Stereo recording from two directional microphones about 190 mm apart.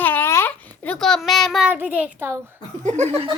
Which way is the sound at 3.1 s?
25° right (ahead or behind).